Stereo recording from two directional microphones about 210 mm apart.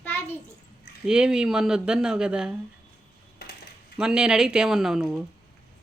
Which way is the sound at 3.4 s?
50° left (ahead or behind).